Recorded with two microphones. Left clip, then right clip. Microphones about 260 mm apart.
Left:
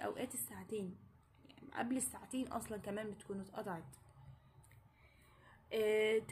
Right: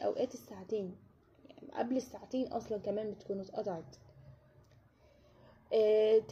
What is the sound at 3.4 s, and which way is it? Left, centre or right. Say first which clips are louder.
Speech: right 6 dB; left.